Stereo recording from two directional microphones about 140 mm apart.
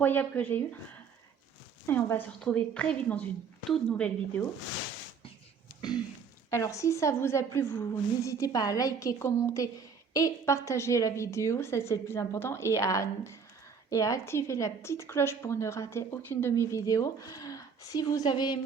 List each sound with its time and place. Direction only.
0.0 s a woman's voice: 15° left (ahead or behind)
1.9 s a woman's voice: 15° left (ahead or behind)
6.5 s a woman's voice: 20° left (ahead or behind)